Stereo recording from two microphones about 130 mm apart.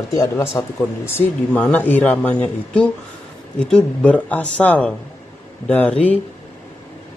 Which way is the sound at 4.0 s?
10° left (ahead or behind).